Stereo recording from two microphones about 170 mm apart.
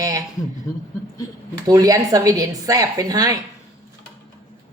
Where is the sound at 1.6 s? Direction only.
20° right (ahead or behind).